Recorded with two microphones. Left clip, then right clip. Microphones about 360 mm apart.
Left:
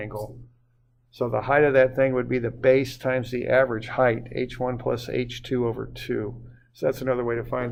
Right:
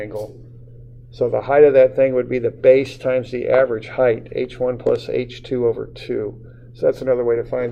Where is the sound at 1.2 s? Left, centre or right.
Left.